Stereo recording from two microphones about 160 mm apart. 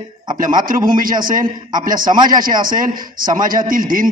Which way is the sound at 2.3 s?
60° right (ahead or behind).